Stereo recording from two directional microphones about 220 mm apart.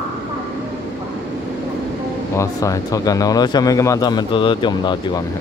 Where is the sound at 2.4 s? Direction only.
15° left (ahead or behind).